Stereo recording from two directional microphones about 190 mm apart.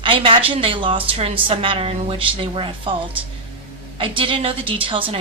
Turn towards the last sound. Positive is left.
turn(degrees=-30)  # may be behind; listen again after turning